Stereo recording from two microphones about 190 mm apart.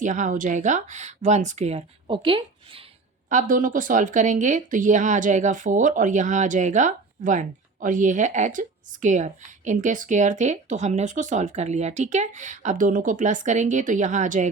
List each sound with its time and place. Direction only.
0.0 s speech: 40° right (ahead or behind)
3.2 s speech: 45° right (ahead or behind)